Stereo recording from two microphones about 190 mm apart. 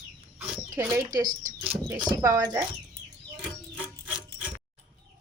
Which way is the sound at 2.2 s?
20° right (ahead or behind).